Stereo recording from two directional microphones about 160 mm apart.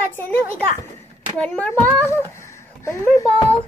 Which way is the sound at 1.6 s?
15° left (ahead or behind).